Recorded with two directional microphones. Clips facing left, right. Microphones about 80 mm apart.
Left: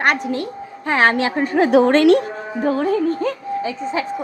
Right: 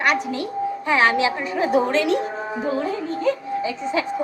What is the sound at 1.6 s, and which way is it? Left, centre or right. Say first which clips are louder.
Speech: left 6 dB; left.